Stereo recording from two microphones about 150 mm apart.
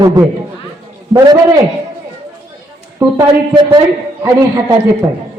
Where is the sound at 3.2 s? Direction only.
30° right (ahead or behind).